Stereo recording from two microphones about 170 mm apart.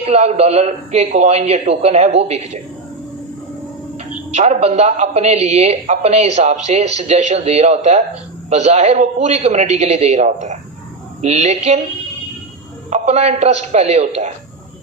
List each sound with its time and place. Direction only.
0.0 s speech: 40° right (ahead or behind)
4.3 s speech: 40° right (ahead or behind)
12.9 s speech: 40° right (ahead or behind)